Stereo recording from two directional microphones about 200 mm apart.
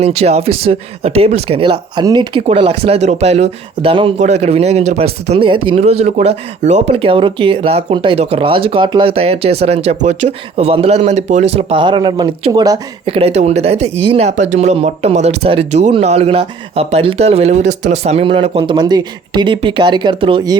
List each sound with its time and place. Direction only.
0.0 s speech: 30° right (ahead or behind)